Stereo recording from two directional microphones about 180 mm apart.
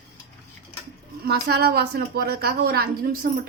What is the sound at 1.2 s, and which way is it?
A woman's voice, 65° right (ahead or behind).